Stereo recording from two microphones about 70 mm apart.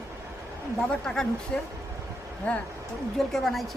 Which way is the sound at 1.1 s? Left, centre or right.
Centre.